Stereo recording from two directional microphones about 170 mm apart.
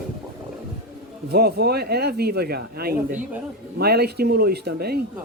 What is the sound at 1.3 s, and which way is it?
Speech, 70° right (ahead or behind).